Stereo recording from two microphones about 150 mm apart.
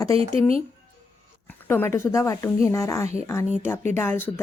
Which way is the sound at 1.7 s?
15° left (ahead or behind).